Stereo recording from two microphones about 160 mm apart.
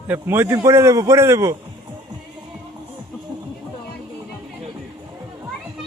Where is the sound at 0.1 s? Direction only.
15° right (ahead or behind).